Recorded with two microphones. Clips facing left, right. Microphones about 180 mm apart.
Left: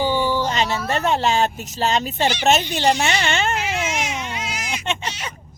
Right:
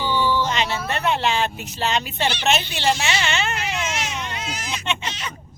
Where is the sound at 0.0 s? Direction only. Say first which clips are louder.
Left 2 dB; 45° left (ahead or behind).